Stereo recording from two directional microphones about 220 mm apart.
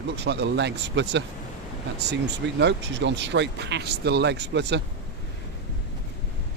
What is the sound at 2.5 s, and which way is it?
Speech, 50° right (ahead or behind).